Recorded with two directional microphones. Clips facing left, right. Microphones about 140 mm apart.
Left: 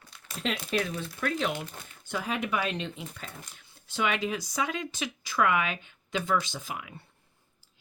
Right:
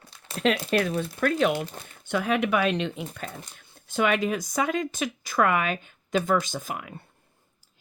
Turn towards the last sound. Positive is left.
turn(degrees=-50)  # may be behind; listen again after turning